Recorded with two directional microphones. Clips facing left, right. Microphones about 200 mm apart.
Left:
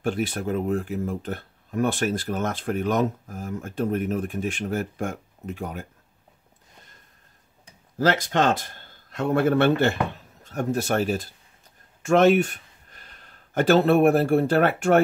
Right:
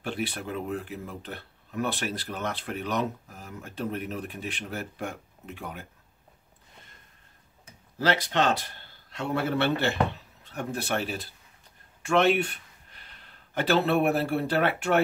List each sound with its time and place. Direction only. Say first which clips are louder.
0.0 s speech: left 6 dB; 45° left (ahead or behind)
8.0 s a man's voice: left 4 dB; 45° left (ahead or behind)